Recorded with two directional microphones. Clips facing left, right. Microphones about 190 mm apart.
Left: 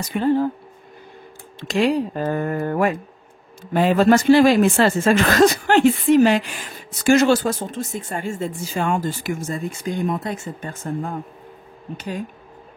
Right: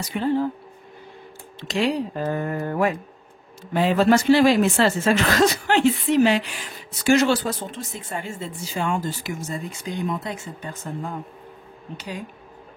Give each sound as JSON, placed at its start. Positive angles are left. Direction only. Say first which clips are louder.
{"t": 0.1, "sound": "speech", "louder": "left 4 dB", "side_deg": 45}
{"t": 1.6, "sound": "speech", "louder": "left 4 dB", "side_deg": 50}